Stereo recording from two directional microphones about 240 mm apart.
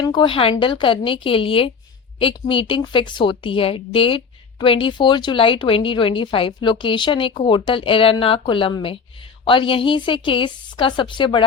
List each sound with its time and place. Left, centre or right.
0.0 s speech: centre